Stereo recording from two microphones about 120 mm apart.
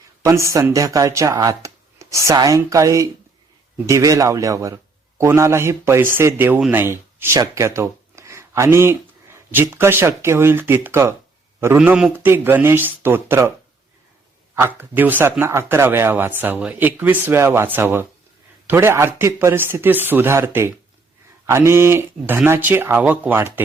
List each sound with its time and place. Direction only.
0.3 s speech: 25° right (ahead or behind)
11.8 s a man's voice: 5° right (ahead or behind)
14.5 s a man's voice: 20° right (ahead or behind)